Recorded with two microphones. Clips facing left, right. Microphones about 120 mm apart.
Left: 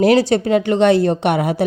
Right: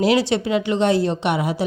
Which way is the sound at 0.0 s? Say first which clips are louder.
Left 5 dB; 45° left (ahead or behind).